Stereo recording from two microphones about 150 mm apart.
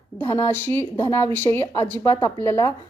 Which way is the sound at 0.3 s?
15° left (ahead or behind).